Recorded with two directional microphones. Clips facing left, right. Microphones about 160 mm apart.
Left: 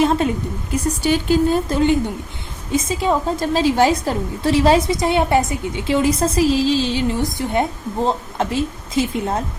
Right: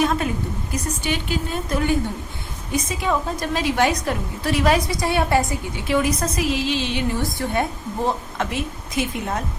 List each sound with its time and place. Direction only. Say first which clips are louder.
0.0 s a sound: left 4 dB; 30° left (ahead or behind)
1.0 s speech: left 12 dB; 35° left (ahead or behind)
2.7 s a woman's voice: left 4 dB; 25° left (ahead or behind)
7.2 s a woman's voice: left 3 dB; 20° left (ahead or behind)